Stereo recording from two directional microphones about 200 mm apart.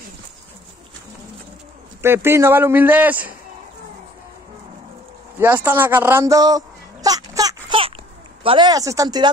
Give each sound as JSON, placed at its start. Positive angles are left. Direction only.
{"t": 2.0, "sound": "a man's voice", "side_deg": -10}
{"t": 5.4, "sound": "a sound", "side_deg": -10}
{"t": 8.5, "sound": "speech", "side_deg": -20}